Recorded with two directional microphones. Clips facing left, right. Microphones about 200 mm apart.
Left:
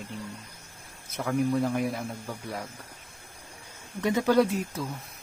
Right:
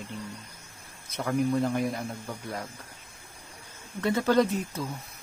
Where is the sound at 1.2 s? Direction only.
Centre (ahead or behind).